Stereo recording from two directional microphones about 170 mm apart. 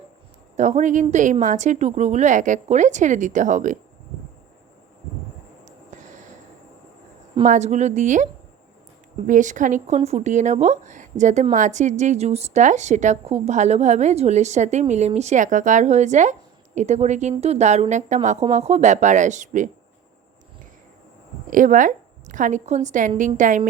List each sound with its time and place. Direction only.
0.5 s a woman's voice: 45° right (ahead or behind)
5.6 s a sound: 45° right (ahead or behind)
7.4 s a woman's voice: 45° right (ahead or behind)
21.5 s a woman's voice: 50° right (ahead or behind)